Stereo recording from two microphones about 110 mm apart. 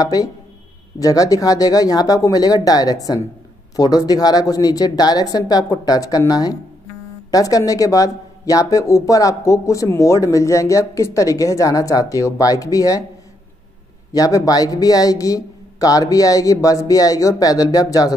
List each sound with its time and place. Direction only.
0.0 s speech: 35° left (ahead or behind)
14.1 s speech: 35° left (ahead or behind)